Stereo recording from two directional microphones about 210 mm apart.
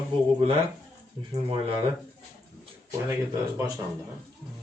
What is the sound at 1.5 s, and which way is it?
Speech, 25° right (ahead or behind).